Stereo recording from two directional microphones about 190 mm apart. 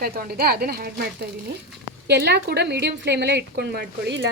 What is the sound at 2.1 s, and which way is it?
Speech, 60° right (ahead or behind).